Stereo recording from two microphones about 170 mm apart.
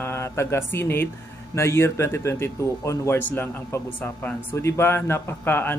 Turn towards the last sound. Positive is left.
turn(degrees=10)  # may be behind; listen again after turning